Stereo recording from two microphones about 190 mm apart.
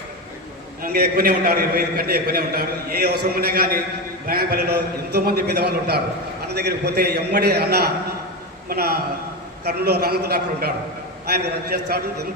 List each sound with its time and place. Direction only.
0.8 s a man's voice: 50° right (ahead or behind)